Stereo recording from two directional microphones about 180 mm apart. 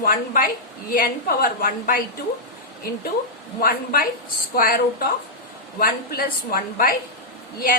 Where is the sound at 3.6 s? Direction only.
55° left (ahead or behind).